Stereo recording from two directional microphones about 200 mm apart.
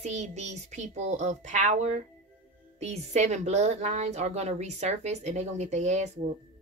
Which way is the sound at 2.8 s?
35° right (ahead or behind).